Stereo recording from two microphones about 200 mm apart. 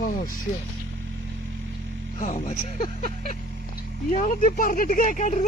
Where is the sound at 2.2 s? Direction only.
30° left (ahead or behind).